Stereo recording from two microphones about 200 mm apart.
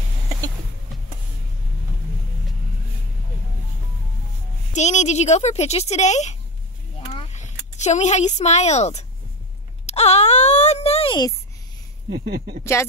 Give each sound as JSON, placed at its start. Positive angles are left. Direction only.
{"t": 4.7, "sound": "speech", "side_deg": 35}
{"t": 7.1, "sound": "a sound", "side_deg": 30}
{"t": 12.1, "sound": "speech", "side_deg": -55}